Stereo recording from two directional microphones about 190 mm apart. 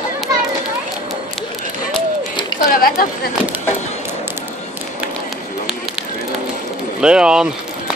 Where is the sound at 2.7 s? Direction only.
50° left (ahead or behind).